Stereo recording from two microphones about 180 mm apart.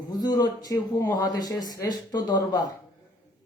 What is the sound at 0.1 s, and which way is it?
A man's voice, 20° left (ahead or behind).